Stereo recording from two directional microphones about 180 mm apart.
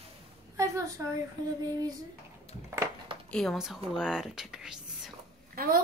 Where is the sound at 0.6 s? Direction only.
15° right (ahead or behind).